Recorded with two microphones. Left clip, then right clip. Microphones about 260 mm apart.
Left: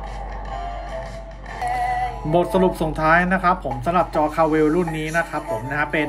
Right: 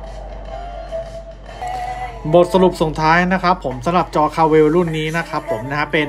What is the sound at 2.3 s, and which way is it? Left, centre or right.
Speech, centre.